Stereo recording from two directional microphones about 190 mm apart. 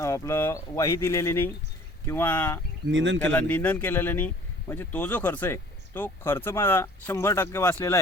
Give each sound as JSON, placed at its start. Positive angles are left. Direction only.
{"t": 0.0, "sound": "speech", "side_deg": 15}
{"t": 2.9, "sound": "speech", "side_deg": -75}
{"t": 3.2, "sound": "speech", "side_deg": 10}